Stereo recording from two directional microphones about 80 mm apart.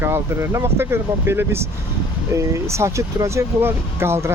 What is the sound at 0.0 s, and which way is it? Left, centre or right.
Speech, right.